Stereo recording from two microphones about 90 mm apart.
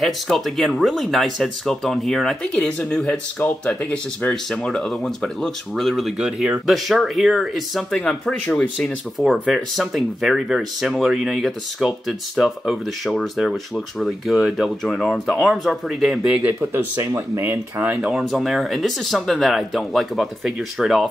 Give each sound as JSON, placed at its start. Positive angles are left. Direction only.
{"t": 0.0, "sound": "speech", "side_deg": 5}
{"t": 9.3, "sound": "speech", "side_deg": 0}
{"t": 16.3, "sound": "speech", "side_deg": -15}
{"t": 16.7, "sound": "speech", "side_deg": -35}
{"t": 17.8, "sound": "speech", "side_deg": -10}